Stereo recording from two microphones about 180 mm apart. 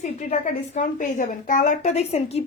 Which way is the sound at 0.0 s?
40° left (ahead or behind).